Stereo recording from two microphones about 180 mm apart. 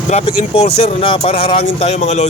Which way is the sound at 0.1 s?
35° left (ahead or behind).